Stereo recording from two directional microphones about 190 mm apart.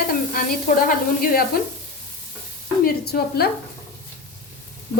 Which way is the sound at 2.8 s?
55° left (ahead or behind).